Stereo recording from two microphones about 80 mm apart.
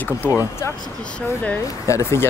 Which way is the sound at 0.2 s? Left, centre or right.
Right.